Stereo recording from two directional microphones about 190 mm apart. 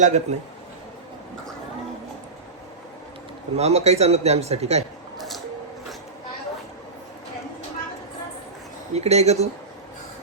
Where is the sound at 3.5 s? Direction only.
35° right (ahead or behind).